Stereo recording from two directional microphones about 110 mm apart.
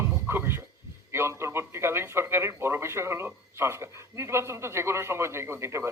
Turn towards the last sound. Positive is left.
turn(degrees=-25)  # may be behind; listen again after turning